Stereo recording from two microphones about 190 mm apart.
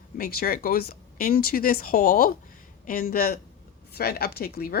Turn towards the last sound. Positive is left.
turn(degrees=55)  # may be behind; listen again after turning